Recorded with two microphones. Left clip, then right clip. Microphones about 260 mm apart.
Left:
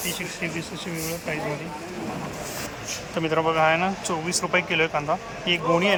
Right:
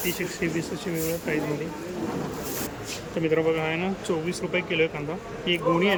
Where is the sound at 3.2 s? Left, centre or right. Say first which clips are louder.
Left 3 dB; centre.